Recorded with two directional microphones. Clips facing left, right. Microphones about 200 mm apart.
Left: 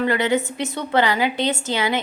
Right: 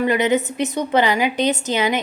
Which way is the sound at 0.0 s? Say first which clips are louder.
Right 2 dB; 20° right (ahead or behind).